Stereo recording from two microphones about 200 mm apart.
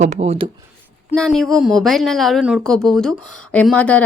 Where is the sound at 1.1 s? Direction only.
Centre (ahead or behind).